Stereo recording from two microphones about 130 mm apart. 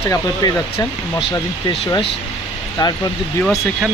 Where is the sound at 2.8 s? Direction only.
35° left (ahead or behind).